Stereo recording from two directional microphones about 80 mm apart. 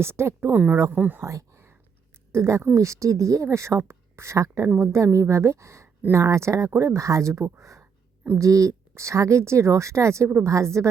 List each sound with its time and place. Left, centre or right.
0.0 s a woman's voice: right
0.5 s speech: right
1.2 s a sound: right
2.3 s a woman's voice: right